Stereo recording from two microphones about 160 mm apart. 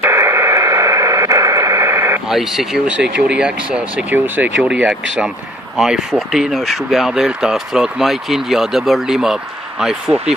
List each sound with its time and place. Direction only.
0.0 s radio: 15° right (ahead or behind)
2.2 s speech: 5° right (ahead or behind)